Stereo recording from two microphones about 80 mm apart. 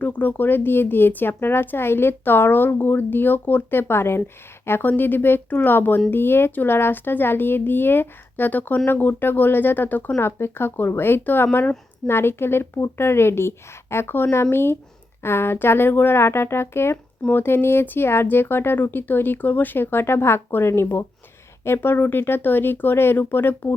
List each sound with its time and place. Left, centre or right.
0.0 s speech: left